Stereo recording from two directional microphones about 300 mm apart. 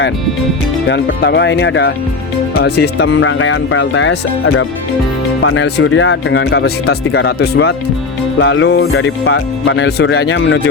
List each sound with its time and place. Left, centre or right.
0.9 s speech: left